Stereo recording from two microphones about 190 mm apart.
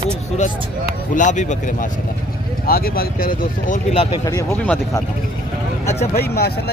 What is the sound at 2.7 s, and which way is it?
Speech, 50° left (ahead or behind).